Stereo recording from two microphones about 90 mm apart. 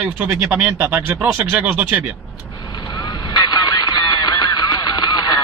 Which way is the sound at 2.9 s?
55° left (ahead or behind).